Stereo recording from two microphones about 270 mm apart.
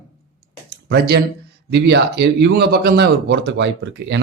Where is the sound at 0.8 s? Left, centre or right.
Right.